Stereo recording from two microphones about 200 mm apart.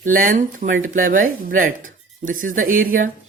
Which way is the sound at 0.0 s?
45° right (ahead or behind).